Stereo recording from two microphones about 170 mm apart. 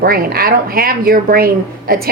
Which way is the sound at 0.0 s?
60° right (ahead or behind).